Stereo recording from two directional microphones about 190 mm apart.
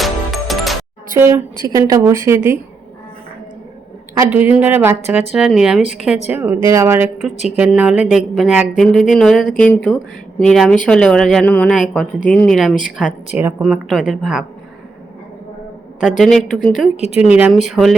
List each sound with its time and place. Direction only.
0.0 s music: centre (ahead or behind)
1.1 s a woman's voice: 10° right (ahead or behind)
4.4 s speech: 10° right (ahead or behind)
6.3 s speech: 15° right (ahead or behind)
16.0 s speech: centre (ahead or behind)
16.8 s speech: 35° left (ahead or behind)
17.2 s speech: 5° right (ahead or behind)